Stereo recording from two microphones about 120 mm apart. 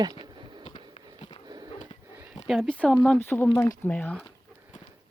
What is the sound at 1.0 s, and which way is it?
Sniff, 55° left (ahead or behind).